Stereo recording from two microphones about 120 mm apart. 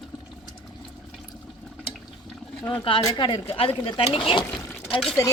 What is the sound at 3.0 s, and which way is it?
Speech, 40° left (ahead or behind).